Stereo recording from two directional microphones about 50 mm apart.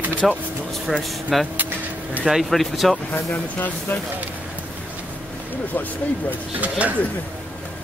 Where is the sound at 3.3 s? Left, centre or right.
Left.